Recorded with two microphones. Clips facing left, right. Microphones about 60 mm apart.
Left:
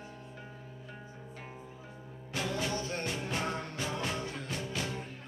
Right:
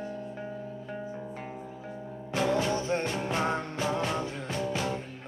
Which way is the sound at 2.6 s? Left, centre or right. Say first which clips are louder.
Right 7 dB; right.